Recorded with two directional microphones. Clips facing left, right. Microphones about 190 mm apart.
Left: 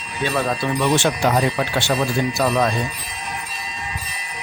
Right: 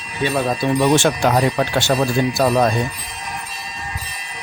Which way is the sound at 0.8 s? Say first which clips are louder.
Right 3 dB; 45° right (ahead or behind).